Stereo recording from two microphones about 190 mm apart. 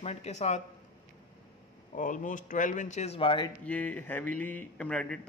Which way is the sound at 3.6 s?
10° left (ahead or behind).